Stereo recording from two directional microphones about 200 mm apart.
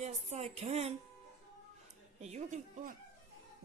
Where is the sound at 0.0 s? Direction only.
35° right (ahead or behind).